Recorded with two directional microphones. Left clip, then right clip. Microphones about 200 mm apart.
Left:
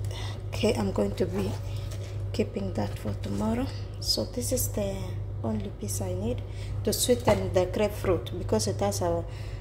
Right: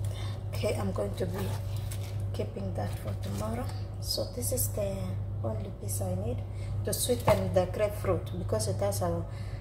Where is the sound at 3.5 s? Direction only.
40° left (ahead or behind).